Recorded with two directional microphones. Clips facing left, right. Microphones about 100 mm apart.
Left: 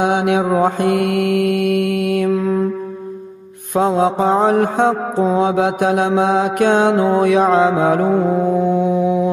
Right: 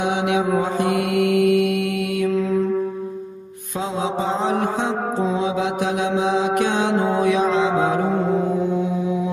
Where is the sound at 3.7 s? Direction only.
55° left (ahead or behind).